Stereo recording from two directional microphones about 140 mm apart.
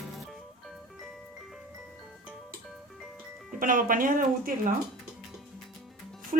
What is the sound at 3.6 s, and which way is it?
Speech, 75° right (ahead or behind).